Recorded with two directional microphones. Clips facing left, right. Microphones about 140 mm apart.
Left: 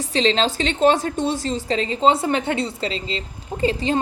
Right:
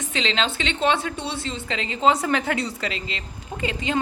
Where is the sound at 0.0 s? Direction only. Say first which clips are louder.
Left 6 dB; 35° left (ahead or behind).